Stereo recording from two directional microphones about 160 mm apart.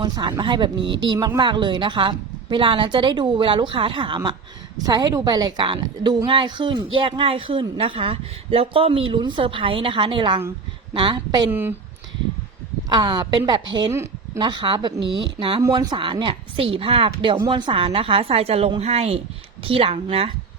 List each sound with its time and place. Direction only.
0.0 s a woman's voice: 25° right (ahead or behind)
12.9 s a woman's voice: 30° right (ahead or behind)